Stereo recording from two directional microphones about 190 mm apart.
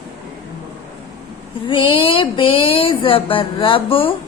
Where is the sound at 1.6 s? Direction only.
25° left (ahead or behind).